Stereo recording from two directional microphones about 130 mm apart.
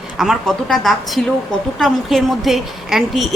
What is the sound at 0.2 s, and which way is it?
A woman's voice, centre (ahead or behind).